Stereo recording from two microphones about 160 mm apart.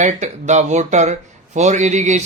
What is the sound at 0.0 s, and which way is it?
Speech, 45° right (ahead or behind).